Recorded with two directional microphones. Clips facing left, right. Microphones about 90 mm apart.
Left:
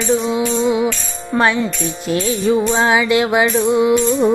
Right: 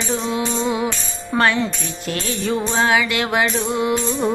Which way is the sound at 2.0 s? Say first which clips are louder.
Left 6 dB; 20° left (ahead or behind).